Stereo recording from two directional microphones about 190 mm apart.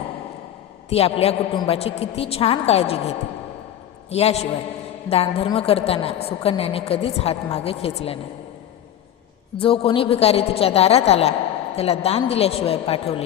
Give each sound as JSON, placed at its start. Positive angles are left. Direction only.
{"t": 0.9, "sound": "a woman's voice", "side_deg": 30}
{"t": 9.6, "sound": "a woman's voice", "side_deg": 30}